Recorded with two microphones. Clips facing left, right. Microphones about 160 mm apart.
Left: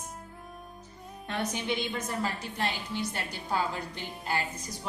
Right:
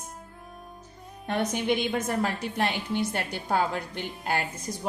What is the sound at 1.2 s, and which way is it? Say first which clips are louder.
A woman's voice: right 6 dB; 55° right (ahead or behind).